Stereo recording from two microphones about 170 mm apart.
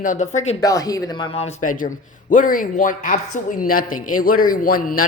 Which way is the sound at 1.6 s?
50° left (ahead or behind).